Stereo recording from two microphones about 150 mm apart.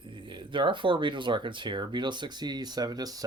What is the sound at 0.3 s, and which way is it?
Speech, 35° right (ahead or behind).